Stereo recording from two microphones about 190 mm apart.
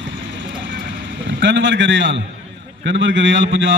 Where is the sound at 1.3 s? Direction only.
70° right (ahead or behind).